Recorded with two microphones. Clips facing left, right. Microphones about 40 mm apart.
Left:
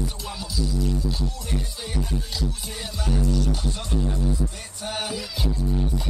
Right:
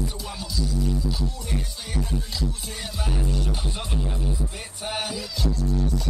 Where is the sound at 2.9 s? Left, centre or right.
Centre.